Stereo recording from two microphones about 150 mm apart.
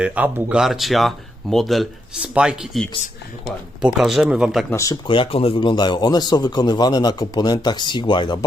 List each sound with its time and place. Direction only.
0.0 s speech: 10° right (ahead or behind)
4.7 s speech: 20° left (ahead or behind)
5.0 s speech: 35° left (ahead or behind)